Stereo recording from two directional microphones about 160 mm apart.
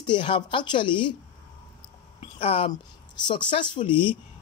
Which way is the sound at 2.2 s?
35° left (ahead or behind).